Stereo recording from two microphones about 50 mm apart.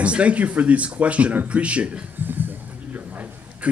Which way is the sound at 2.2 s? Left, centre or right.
Right.